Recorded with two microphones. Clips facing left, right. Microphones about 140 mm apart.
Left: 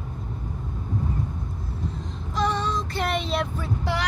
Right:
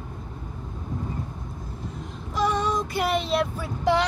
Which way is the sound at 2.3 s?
10° right (ahead or behind).